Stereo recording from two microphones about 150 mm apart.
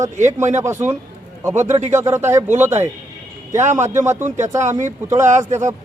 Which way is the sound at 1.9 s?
15° right (ahead or behind).